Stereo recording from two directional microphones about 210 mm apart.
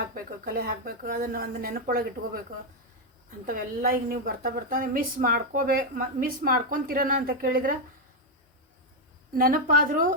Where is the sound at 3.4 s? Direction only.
45° right (ahead or behind).